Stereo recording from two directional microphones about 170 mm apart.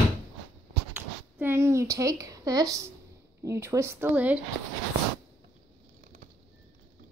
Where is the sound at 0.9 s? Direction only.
15° right (ahead or behind).